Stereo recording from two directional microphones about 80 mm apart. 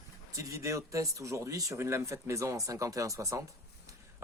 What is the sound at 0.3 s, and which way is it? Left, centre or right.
Speech, right.